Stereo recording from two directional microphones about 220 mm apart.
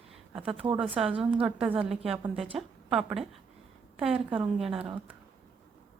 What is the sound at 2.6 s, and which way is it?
Speech, centre (ahead or behind).